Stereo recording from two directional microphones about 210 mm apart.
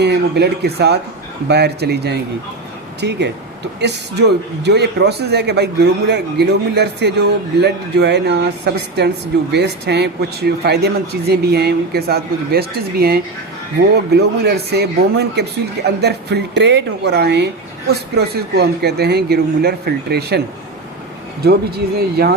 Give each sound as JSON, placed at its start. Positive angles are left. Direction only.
{"t": 0.0, "sound": "speech", "side_deg": -50}
{"t": 21.9, "sound": "speech", "side_deg": -50}